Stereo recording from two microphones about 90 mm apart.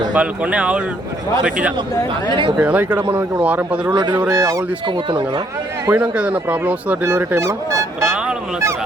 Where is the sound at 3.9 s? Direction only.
50° right (ahead or behind).